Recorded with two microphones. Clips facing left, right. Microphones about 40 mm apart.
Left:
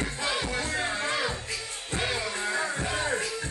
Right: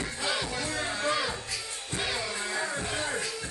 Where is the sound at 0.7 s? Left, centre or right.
Left.